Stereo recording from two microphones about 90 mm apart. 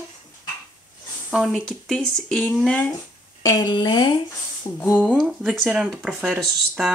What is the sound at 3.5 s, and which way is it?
Speech, 50° left (ahead or behind).